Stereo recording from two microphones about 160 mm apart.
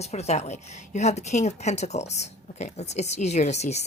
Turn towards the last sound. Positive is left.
turn(degrees=45)  # may be behind; listen again after turning